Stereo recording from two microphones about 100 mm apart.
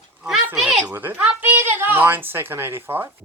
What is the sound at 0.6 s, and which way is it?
Speech, 15° right (ahead or behind).